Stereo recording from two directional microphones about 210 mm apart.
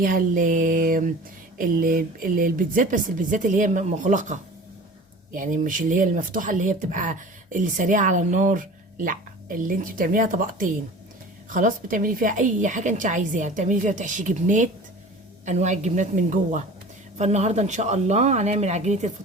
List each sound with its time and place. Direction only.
0.0 s speech: 40° right (ahead or behind)